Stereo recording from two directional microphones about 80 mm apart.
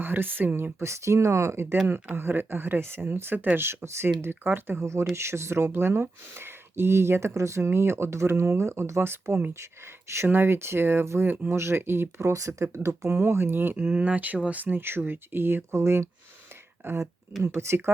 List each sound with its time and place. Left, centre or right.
0.0 s speech: right
12.3 s speech: right
17.6 s speech: right